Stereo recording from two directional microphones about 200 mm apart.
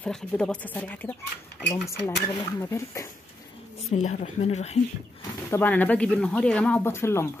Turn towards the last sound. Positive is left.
turn(degrees=10)  # may be behind; listen again after turning